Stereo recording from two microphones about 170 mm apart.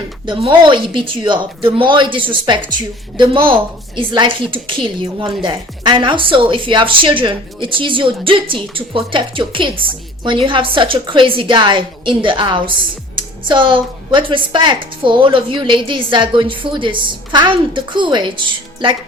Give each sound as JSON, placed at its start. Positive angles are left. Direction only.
{"t": 0.3, "sound": "speech", "side_deg": -30}